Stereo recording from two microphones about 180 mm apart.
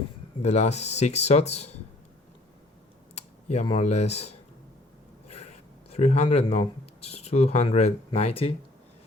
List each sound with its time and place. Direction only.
0.4 s speech: 40° left (ahead or behind)
3.2 s speech: 35° left (ahead or behind)